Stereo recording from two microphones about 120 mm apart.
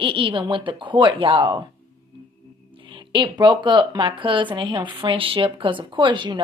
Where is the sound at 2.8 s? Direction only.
45° right (ahead or behind).